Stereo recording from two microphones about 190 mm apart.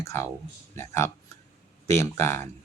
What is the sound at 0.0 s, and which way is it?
Speech, 15° left (ahead or behind).